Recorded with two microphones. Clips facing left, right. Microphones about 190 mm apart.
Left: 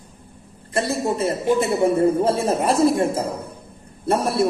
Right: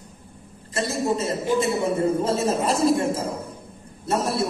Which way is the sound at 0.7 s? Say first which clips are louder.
Left 2 dB; 60° left (ahead or behind).